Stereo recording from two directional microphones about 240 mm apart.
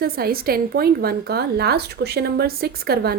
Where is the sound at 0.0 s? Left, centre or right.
Right.